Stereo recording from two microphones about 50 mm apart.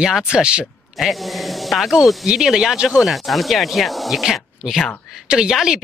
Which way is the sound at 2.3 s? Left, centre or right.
Centre.